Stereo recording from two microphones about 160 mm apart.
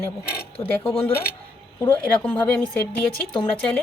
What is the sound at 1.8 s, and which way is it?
A woman's voice, 10° left (ahead or behind).